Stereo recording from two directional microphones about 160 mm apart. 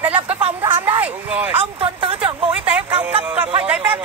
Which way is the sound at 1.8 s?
35° right (ahead or behind).